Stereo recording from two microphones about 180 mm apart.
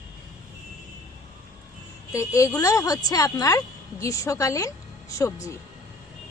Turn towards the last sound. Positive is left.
turn(degrees=15)  # may be behind; listen again after turning